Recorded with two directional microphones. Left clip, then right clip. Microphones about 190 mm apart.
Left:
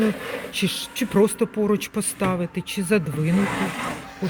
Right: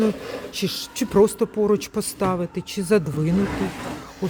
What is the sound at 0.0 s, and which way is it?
A woman's voice, 10° right (ahead or behind).